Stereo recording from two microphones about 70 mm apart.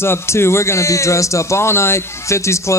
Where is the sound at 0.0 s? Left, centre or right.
Left.